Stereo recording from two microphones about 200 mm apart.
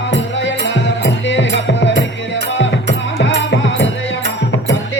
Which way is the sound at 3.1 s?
60° left (ahead or behind).